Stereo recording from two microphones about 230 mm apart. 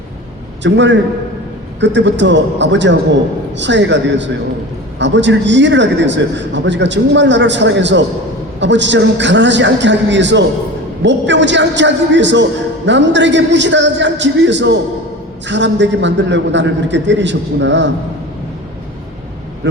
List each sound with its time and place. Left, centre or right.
0.6 s a man's voice: right